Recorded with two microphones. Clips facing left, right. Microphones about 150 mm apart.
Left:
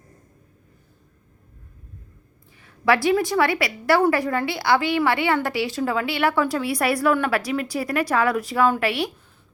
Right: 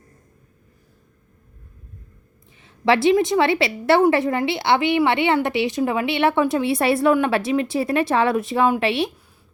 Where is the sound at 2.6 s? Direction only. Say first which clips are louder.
Right 2 dB; 25° right (ahead or behind).